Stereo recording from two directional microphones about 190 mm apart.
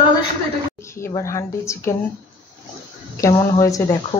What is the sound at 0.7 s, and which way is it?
A woman's voice, 15° left (ahead or behind).